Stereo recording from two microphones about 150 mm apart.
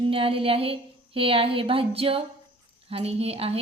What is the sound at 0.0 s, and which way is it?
A woman's voice, 35° right (ahead or behind).